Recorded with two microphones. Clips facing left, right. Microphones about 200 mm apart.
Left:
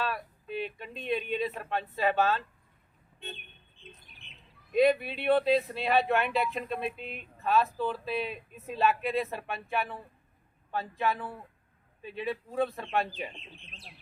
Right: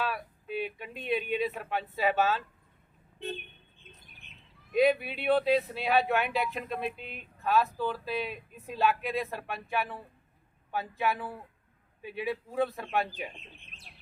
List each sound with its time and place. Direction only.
0.0 s speech: 5° right (ahead or behind)
4.2 s bird: 45° right (ahead or behind)
4.7 s speech: centre (ahead or behind)